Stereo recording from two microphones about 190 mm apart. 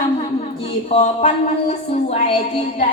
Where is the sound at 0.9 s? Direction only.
35° left (ahead or behind).